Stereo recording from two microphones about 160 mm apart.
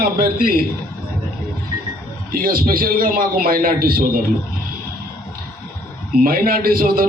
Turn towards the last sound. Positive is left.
turn(degrees=-65)  # may be behind; listen again after turning